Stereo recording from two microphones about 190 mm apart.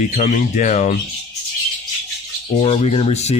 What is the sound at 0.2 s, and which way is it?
Speech, 45° left (ahead or behind).